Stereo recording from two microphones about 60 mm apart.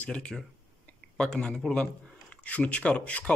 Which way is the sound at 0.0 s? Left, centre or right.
Centre.